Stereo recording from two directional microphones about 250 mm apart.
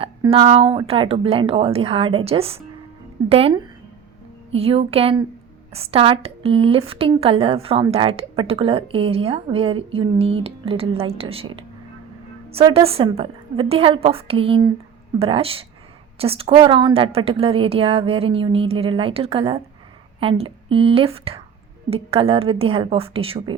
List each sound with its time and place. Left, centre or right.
0.0 s a woman's voice: right